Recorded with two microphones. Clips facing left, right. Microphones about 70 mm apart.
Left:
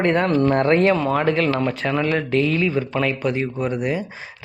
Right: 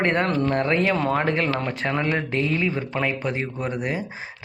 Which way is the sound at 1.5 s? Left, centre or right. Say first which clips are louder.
Left 4 dB; right.